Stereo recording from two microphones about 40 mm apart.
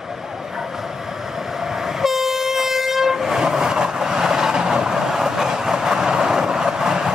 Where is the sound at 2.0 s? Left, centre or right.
Centre.